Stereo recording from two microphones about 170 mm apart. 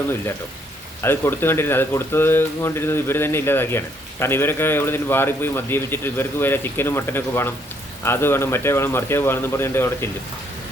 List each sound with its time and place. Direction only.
1.0 s speech: 15° left (ahead or behind)